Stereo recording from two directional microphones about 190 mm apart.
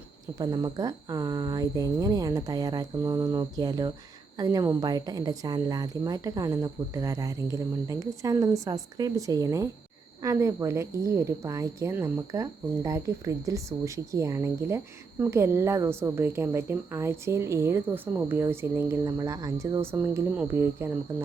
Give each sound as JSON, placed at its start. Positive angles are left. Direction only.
{"t": 0.3, "sound": "speech", "side_deg": -20}